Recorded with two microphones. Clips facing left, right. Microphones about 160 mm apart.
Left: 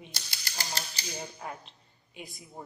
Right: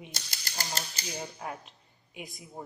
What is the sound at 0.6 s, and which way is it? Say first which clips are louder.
Typewriter: right 1 dB; 40° right (ahead or behind).